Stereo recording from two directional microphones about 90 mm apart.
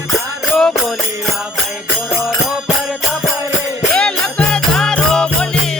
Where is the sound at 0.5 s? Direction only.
Centre (ahead or behind).